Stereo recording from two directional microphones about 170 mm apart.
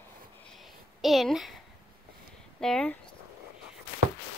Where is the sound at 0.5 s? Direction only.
Centre (ahead or behind).